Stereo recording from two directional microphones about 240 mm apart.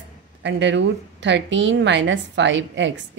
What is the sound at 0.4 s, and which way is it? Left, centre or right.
Speech, right.